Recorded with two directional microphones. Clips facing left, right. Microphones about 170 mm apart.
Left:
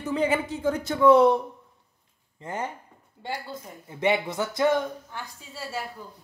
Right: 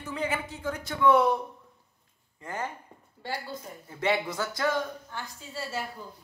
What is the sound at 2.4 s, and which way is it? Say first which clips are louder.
Speech: left 3 dB; 20° left (ahead or behind).